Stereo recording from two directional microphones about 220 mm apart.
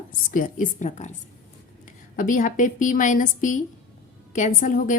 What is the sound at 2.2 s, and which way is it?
A woman's voice, 35° left (ahead or behind).